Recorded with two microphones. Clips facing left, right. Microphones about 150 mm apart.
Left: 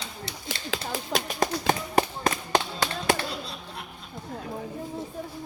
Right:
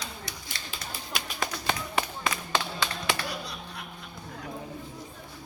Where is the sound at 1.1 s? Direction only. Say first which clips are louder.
Left 7 dB; 45° left (ahead or behind).